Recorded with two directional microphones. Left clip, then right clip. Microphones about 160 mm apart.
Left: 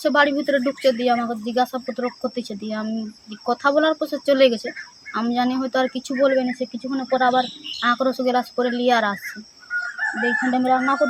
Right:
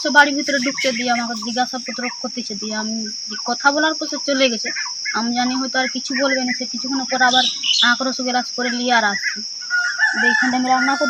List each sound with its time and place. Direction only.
0.0 s speech: 25° left (ahead or behind)
3.4 s speech: 30° left (ahead or behind)
10.2 s speech: 20° left (ahead or behind)